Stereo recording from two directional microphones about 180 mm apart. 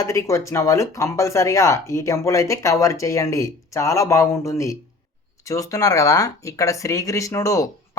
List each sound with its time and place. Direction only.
0.0 s speech: 15° left (ahead or behind)